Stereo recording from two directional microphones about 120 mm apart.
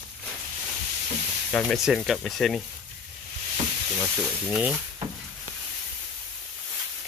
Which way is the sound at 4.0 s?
Centre (ahead or behind).